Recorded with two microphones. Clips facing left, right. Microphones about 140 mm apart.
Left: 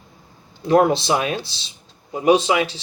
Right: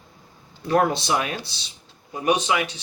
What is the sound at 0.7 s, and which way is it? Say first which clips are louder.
Speech: left 5 dB; 25° left (ahead or behind).